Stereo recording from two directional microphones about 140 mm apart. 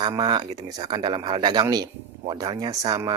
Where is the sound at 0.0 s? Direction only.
30° right (ahead or behind).